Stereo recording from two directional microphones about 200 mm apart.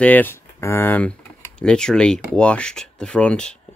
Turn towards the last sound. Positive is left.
turn(degrees=5)  # may be behind; listen again after turning